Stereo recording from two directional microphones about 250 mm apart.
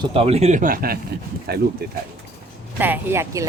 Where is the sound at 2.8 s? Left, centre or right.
Centre.